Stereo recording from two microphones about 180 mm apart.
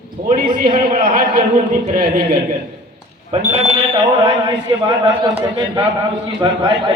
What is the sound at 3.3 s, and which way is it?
A man's voice, 35° right (ahead or behind).